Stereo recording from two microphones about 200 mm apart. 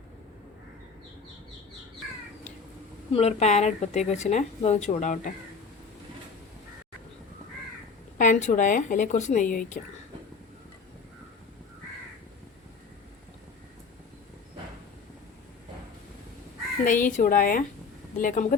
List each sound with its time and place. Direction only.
3.1 s a woman's voice: 30° left (ahead or behind)
8.2 s a woman's voice: 35° left (ahead or behind)
16.8 s a woman's voice: 40° left (ahead or behind)